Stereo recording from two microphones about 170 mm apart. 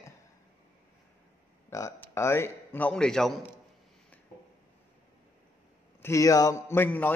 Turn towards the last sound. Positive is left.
turn(degrees=10)  # may be behind; listen again after turning